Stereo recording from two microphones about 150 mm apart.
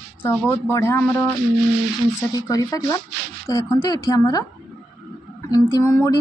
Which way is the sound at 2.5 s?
25° left (ahead or behind).